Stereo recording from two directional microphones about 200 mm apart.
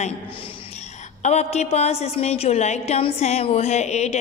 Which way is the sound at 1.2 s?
35° left (ahead or behind).